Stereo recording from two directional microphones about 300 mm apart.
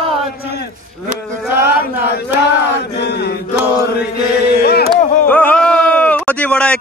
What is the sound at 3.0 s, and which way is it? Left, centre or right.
Chant, left.